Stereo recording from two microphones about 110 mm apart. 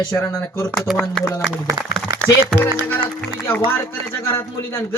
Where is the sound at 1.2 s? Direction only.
20° left (ahead or behind).